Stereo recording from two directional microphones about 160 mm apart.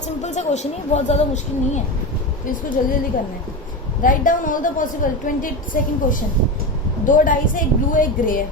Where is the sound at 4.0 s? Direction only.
55° left (ahead or behind).